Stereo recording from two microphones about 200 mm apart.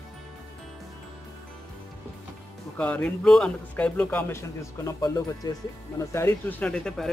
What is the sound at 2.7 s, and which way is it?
Speech, 5° left (ahead or behind).